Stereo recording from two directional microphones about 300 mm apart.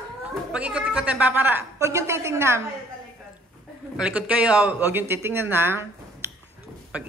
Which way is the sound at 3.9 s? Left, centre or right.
Centre.